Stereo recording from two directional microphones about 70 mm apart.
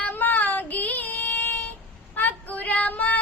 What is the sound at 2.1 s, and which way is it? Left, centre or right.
Female singing, left.